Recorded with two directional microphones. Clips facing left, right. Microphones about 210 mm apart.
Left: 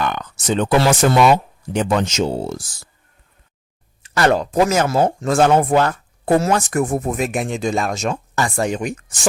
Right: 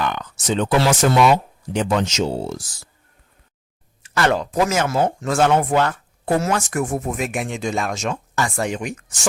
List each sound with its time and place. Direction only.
0.0 s speech: 50° left (ahead or behind)
4.0 s speech: 40° left (ahead or behind)